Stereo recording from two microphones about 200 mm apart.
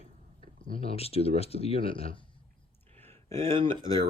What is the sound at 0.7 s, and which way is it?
Speech, 30° left (ahead or behind).